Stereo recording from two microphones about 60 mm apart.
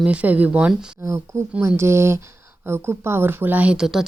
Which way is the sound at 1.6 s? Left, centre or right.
Right.